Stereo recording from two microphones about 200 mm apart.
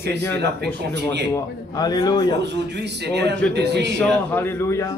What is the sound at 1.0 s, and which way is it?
Speech, 55° right (ahead or behind).